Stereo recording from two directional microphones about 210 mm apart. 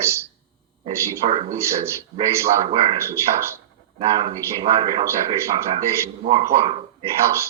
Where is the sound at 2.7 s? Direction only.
25° right (ahead or behind).